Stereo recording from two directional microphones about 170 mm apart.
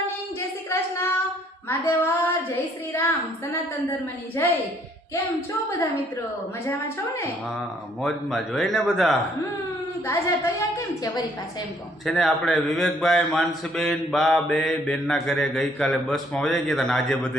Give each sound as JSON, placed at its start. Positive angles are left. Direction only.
{"t": 0.3, "sound": "a sound", "side_deg": 15}
{"t": 1.6, "sound": "a woman's voice", "side_deg": 15}
{"t": 4.4, "sound": "a woman's voice", "side_deg": 15}
{"t": 8.0, "sound": "a man's voice", "side_deg": 0}
{"t": 10.1, "sound": "a woman's voice", "side_deg": 15}
{"t": 12.0, "sound": "a man's voice", "side_deg": 0}